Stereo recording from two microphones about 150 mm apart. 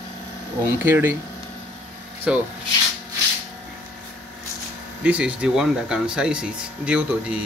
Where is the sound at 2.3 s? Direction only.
5° right (ahead or behind).